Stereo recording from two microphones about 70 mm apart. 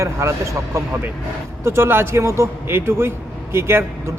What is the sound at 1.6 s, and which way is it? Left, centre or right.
Speech, right.